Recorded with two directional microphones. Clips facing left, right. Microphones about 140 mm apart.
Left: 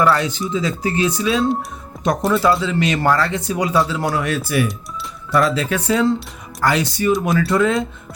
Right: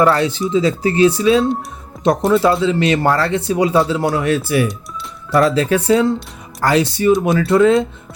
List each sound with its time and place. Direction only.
0.0 s speech: 30° right (ahead or behind)